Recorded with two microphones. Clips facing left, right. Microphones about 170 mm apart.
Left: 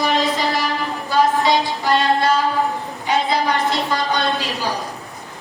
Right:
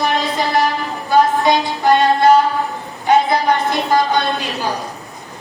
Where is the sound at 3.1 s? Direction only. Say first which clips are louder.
Right 5 dB; 50° right (ahead or behind).